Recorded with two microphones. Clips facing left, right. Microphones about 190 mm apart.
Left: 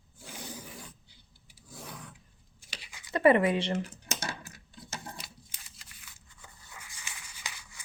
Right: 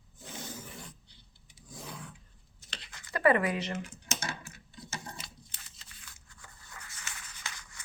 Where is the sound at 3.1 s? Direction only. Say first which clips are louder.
Left 4 dB; 25° left (ahead or behind).